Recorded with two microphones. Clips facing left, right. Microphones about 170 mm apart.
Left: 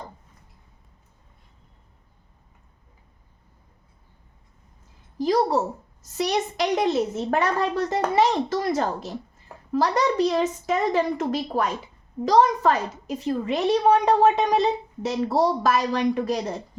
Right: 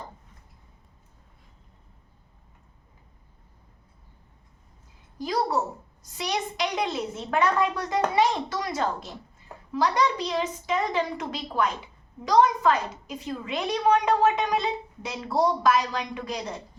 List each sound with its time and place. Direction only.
6.1 s a woman's voice: 40° left (ahead or behind)